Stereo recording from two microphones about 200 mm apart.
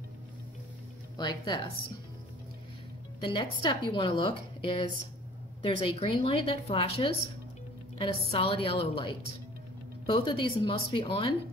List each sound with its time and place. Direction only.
1.1 s a woman's voice: 20° left (ahead or behind)
3.2 s a woman's voice: 25° left (ahead or behind)